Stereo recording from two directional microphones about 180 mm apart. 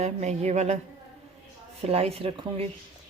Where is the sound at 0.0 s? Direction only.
40° right (ahead or behind).